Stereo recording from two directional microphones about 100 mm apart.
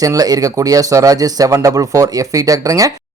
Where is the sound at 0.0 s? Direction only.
35° right (ahead or behind).